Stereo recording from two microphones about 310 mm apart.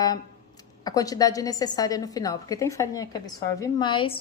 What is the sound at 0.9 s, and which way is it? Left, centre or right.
A woman's voice, centre.